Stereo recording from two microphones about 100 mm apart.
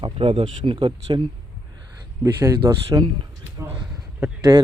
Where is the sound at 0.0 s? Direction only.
60° right (ahead or behind).